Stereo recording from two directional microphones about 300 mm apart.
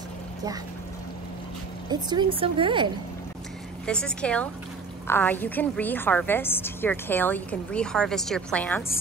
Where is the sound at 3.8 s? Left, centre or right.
Centre.